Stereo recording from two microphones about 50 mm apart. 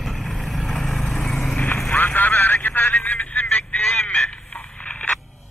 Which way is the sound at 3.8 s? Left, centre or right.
Centre.